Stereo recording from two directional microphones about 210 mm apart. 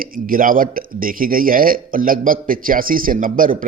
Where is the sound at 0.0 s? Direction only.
40° right (ahead or behind).